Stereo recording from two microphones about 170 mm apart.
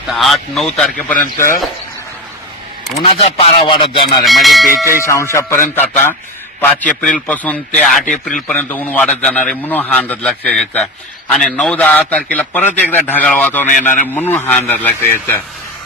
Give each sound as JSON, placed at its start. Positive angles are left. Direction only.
{"t": 0.1, "sound": "a man's voice", "side_deg": 0}
{"t": 3.0, "sound": "speech", "side_deg": 35}
{"t": 4.2, "sound": "a man's voice", "side_deg": 0}
{"t": 4.8, "sound": "a man's voice", "side_deg": 15}